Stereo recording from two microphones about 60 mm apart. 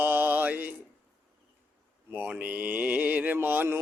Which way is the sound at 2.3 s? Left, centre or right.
Right.